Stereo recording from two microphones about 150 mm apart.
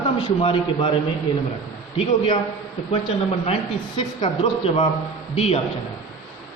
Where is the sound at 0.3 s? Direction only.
35° left (ahead or behind).